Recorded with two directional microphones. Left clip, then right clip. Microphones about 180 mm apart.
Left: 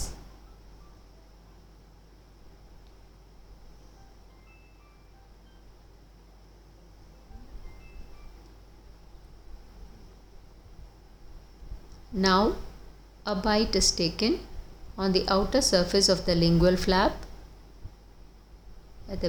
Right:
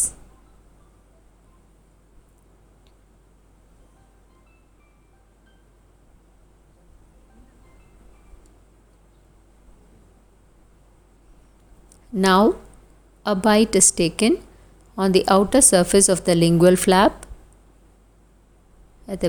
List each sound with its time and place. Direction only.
12.1 s a woman's voice: 45° right (ahead or behind)
19.1 s speech: 50° right (ahead or behind)